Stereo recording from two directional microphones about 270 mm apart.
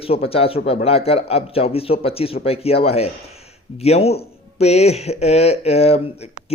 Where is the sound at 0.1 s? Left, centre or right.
Left.